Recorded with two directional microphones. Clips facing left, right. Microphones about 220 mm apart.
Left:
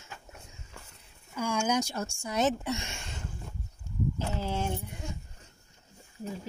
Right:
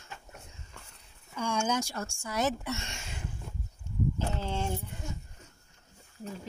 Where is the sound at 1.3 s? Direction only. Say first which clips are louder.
Left 2 dB; 10° left (ahead or behind).